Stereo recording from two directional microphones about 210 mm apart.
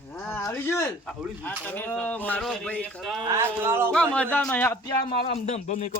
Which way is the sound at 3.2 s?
10° right (ahead or behind).